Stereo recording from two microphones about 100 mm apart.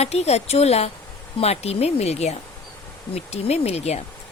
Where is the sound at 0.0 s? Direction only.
90° left.